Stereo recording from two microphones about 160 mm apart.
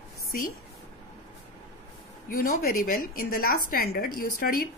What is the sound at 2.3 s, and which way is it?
A woman's voice, 65° left (ahead or behind).